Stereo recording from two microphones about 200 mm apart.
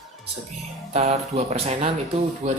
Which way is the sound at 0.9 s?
30° right (ahead or behind).